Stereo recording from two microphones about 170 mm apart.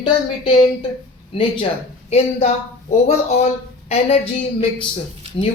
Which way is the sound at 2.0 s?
40° left (ahead or behind).